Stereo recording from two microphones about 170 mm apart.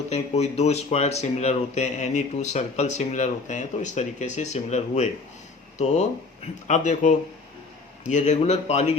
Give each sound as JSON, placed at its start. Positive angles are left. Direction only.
{"t": 0.1, "sound": "speech", "side_deg": 40}